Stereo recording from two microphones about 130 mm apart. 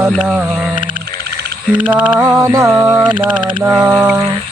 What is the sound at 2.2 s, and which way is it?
Speech, 20° right (ahead or behind).